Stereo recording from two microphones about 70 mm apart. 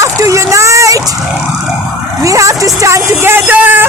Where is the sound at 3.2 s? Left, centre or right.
Right.